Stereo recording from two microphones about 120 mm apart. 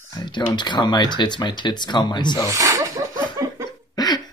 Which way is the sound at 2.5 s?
25° right (ahead or behind).